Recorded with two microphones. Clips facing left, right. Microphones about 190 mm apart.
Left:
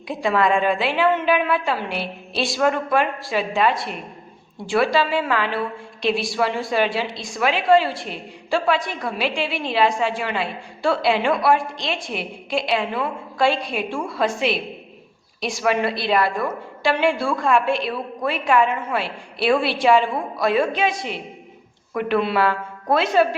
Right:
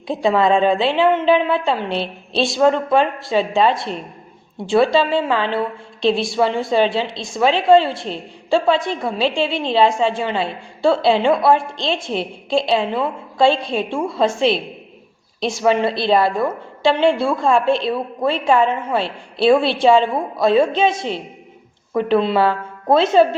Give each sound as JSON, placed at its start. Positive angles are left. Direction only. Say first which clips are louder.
{"t": 0.1, "sound": "a woman's voice", "louder": "right 4 dB", "side_deg": -25}